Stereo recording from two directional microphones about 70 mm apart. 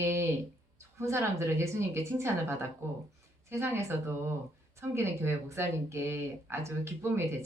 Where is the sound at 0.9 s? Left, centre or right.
Right.